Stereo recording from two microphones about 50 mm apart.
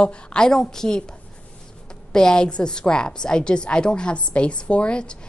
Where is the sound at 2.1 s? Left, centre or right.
Centre.